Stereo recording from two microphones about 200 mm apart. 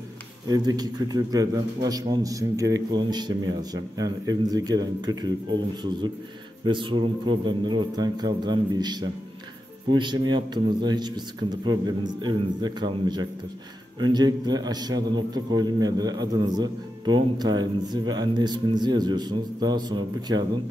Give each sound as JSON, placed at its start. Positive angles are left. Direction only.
{"t": 0.5, "sound": "a man's voice", "side_deg": -20}
{"t": 6.6, "sound": "a man's voice", "side_deg": -25}